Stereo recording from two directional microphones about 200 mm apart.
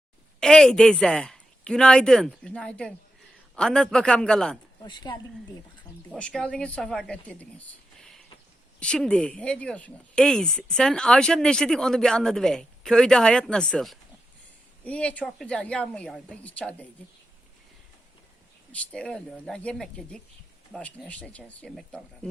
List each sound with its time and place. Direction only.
0.3 s speech: 5° left (ahead or behind)
4.8 s speech: 20° left (ahead or behind)
6.1 s speech: 5° left (ahead or behind)
18.7 s speech: 5° left (ahead or behind)